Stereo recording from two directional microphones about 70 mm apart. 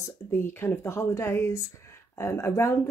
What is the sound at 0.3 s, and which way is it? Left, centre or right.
A woman's voice, left.